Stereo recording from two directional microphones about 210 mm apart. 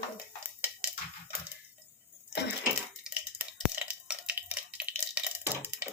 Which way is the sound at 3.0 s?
5° right (ahead or behind).